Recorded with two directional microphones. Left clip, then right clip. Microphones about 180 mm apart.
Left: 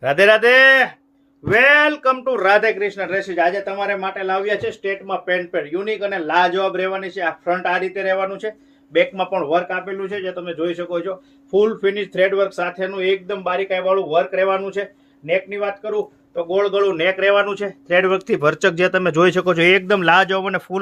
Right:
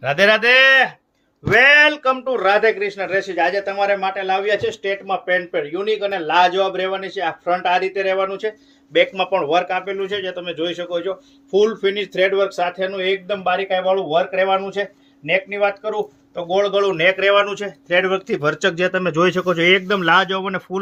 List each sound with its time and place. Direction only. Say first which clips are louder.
0.0 s speech: left 2 dB; 45° left (ahead or behind)
1.5 s a sound: right 1 dB; 20° left (ahead or behind)
2.0 s speech: left 1 dB; 45° left (ahead or behind)
3.1 s speech: even; 15° left (ahead or behind); by 20.7 s 40° left (ahead or behind)